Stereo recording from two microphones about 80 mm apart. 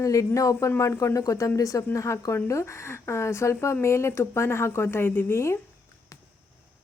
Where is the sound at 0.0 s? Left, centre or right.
Left.